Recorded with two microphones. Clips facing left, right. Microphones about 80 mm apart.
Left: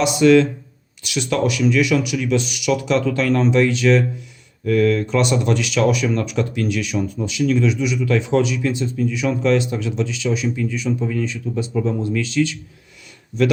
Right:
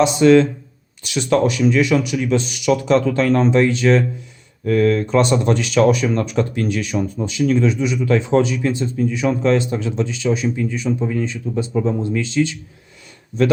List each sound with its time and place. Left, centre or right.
0.0 s speech: right